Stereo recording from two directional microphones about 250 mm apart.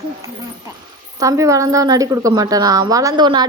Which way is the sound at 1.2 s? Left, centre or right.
Centre.